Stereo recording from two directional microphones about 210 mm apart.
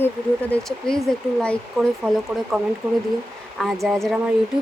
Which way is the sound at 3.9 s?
Centre (ahead or behind).